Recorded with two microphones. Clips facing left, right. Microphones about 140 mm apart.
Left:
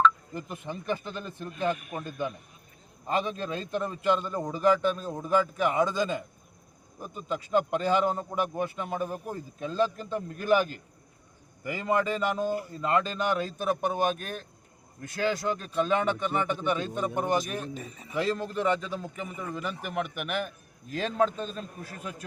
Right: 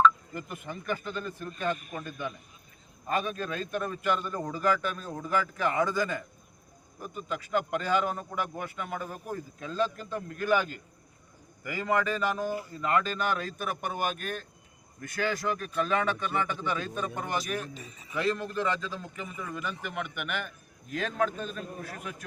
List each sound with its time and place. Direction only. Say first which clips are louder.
0.3 s a man's voice: left 2 dB; 30° left (ahead or behind)
1.8 s a man's voice: left 2 dB; 50° left (ahead or behind)
2.0 s a man's voice: left 4 dB; 30° left (ahead or behind)
17.7 s speech: left 5 dB; 50° left (ahead or behind)
18.1 s a man's voice: left 1 dB; 25° left (ahead or behind)